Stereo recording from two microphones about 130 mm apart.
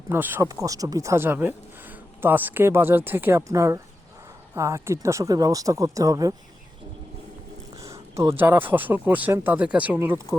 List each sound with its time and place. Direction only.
0.1 s speech: 15° right (ahead or behind)
8.1 s speech: 20° right (ahead or behind)